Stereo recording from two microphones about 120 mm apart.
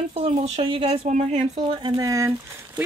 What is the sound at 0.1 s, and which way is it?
Speech, 55° right (ahead or behind).